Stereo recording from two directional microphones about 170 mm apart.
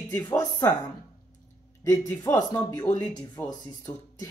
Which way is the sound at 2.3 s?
20° left (ahead or behind).